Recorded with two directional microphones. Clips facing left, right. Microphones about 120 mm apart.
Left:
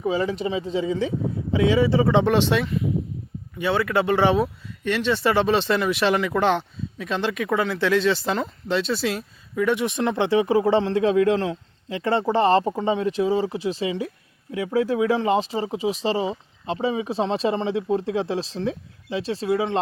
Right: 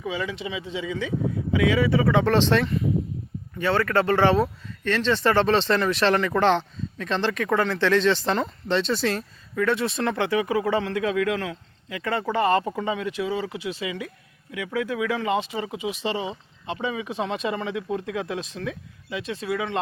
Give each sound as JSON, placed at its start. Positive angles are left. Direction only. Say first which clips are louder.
{"t": 0.0, "sound": "speech", "louder": "left 6 dB", "side_deg": 40}